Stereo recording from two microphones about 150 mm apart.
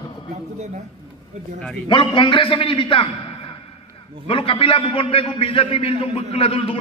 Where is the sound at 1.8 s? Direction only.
30° left (ahead or behind).